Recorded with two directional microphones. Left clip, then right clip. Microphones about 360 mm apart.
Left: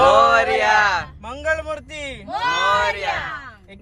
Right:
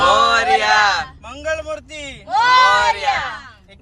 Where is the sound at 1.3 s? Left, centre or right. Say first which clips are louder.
Left 2 dB; centre.